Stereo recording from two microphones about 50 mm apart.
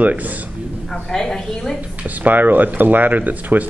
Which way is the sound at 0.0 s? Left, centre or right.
Right.